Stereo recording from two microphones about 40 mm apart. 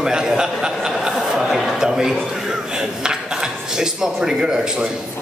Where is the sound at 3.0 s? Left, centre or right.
Centre.